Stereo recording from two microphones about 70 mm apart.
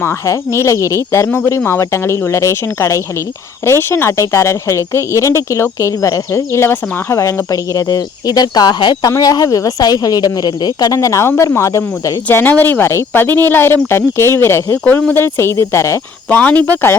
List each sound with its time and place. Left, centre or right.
0.0 s speech: left
7.2 s speech: left
9.1 s speech: left
10.9 s speech: left
12.3 s speech: left
12.8 s speech: left
16.3 s speech: left